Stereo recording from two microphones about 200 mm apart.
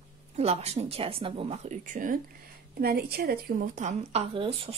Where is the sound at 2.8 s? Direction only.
50° right (ahead or behind).